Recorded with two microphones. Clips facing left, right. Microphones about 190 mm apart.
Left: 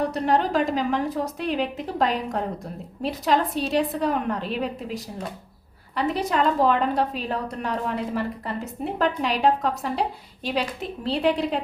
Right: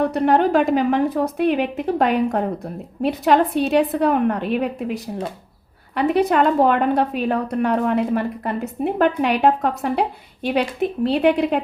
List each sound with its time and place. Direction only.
0.0 s a woman's voice: 60° right (ahead or behind)